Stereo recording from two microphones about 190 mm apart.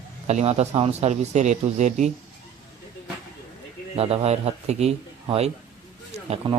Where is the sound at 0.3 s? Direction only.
35° right (ahead or behind).